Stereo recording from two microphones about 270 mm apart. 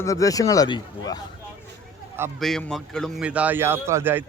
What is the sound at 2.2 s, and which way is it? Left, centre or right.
A man's voice, centre.